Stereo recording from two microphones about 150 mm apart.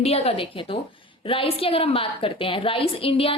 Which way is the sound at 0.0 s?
40° left (ahead or behind).